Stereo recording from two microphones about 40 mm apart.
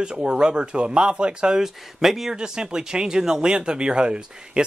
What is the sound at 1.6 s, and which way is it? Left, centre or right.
Speech, centre.